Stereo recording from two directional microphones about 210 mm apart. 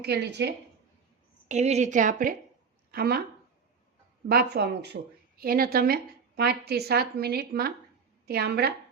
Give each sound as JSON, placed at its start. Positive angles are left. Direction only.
{"t": 0.0, "sound": "a woman's voice", "side_deg": -50}
{"t": 1.5, "sound": "a woman's voice", "side_deg": -30}
{"t": 4.3, "sound": "a woman's voice", "side_deg": -50}